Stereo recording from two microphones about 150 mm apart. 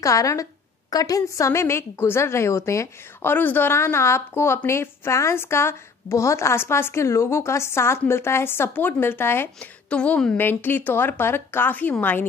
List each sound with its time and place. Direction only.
0.0 s a woman's voice: 20° left (ahead or behind)